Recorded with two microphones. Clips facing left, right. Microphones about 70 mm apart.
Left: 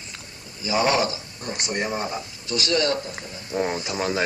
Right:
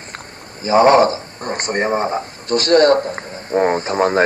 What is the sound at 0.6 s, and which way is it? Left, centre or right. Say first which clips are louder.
Speech: right 11 dB; right.